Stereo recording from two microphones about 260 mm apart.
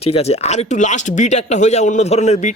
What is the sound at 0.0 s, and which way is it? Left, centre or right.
Speech, left.